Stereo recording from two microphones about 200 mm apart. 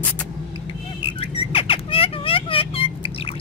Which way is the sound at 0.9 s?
25° left (ahead or behind).